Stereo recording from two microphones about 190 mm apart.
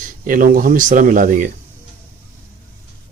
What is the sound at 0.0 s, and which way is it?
Speech, 45° right (ahead or behind).